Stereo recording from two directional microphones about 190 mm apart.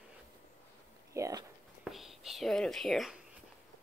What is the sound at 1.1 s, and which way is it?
Speech, 20° right (ahead or behind).